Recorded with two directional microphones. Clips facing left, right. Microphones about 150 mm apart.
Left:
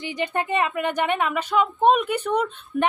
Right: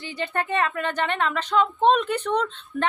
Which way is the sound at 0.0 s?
15° left (ahead or behind).